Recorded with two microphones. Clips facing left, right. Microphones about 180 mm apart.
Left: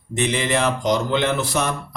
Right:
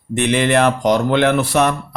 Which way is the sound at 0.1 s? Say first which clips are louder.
Right 6 dB; 60° right (ahead or behind).